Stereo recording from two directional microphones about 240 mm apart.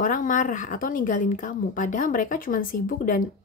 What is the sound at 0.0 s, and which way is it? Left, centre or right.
Speech, left.